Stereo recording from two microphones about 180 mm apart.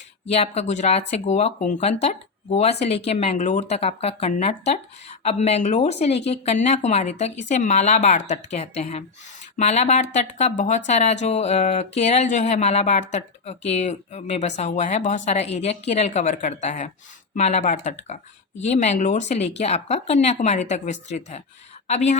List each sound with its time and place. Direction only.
0.3 s a woman's voice: 35° left (ahead or behind)